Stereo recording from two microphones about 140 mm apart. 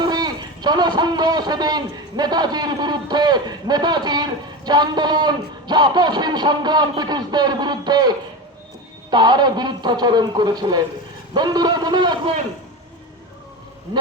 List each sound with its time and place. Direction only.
0.0 s a man's voice: 30° right (ahead or behind)